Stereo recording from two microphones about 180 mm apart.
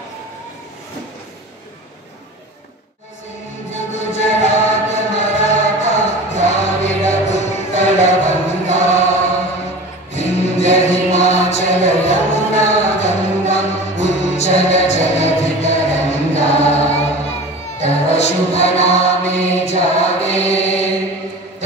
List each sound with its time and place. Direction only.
3.7 s music: 40° left (ahead or behind)
8.6 s choir: 40° left (ahead or behind)
10.1 s music: 35° left (ahead or behind)
16.5 s choir: 35° left (ahead or behind)
17.8 s music: 35° left (ahead or behind)